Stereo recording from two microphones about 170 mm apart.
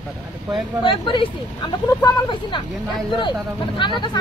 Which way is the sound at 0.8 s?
30° left (ahead or behind).